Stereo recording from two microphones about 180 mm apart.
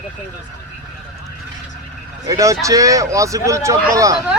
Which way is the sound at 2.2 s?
20° right (ahead or behind).